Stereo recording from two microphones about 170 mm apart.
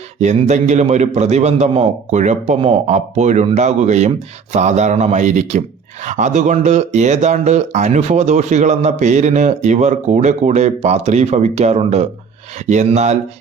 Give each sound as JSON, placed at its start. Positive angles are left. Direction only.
{"t": 0.2, "sound": "a man's voice", "side_deg": -45}